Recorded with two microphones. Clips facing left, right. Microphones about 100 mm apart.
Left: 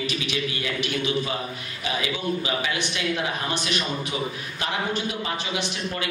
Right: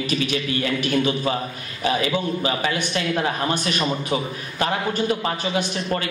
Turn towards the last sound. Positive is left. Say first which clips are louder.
# right 5 dB
turn(degrees=-45)  # may be behind; listen again after turning